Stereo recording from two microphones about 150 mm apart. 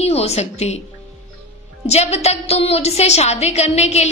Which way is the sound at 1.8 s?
45° left (ahead or behind).